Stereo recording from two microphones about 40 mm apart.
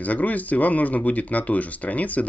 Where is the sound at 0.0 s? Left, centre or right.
Left.